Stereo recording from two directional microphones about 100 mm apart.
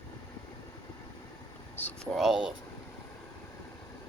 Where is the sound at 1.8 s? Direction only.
15° left (ahead or behind).